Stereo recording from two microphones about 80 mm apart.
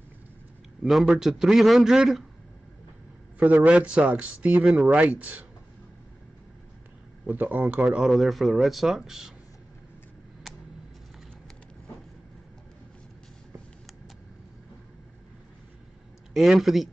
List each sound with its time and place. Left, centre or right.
0.8 s a man's voice: centre
3.6 s speech: centre
7.2 s speech: right
8.1 s a man's voice: centre
16.3 s a man's voice: centre